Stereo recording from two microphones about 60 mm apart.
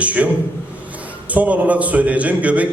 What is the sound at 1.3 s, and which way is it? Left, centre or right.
A man's voice, right.